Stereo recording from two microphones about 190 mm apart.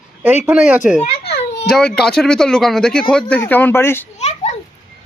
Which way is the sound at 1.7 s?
5° left (ahead or behind).